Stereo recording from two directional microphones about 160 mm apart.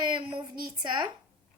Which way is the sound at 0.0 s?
30° right (ahead or behind).